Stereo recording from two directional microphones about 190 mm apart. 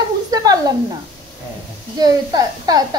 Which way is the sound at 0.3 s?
20° right (ahead or behind).